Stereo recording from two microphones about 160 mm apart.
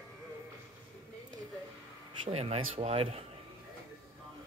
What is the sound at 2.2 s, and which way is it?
Speech, 40° right (ahead or behind).